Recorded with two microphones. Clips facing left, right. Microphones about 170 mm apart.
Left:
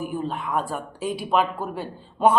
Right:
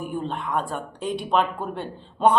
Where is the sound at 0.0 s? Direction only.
5° left (ahead or behind).